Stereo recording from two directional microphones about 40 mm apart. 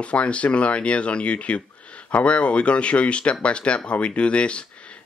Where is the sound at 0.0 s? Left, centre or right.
Left.